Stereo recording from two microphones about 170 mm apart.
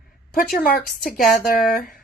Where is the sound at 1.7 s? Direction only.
55° left (ahead or behind).